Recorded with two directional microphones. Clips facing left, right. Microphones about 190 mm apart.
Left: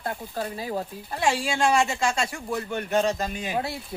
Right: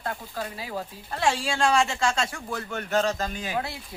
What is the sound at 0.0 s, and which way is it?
Speech, 30° left (ahead or behind).